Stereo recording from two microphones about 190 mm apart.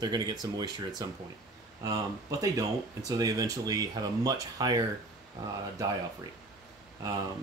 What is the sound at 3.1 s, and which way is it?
Speech, 20° right (ahead or behind).